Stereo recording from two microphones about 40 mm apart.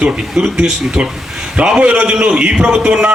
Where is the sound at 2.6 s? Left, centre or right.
Centre.